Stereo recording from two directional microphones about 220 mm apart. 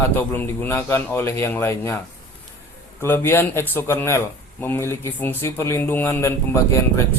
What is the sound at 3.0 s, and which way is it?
A man's voice, 10° left (ahead or behind).